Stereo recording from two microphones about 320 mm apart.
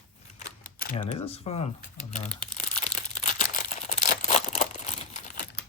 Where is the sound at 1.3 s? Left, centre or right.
Centre.